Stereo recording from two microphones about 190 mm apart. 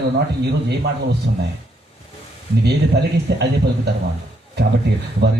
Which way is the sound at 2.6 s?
60° right (ahead or behind).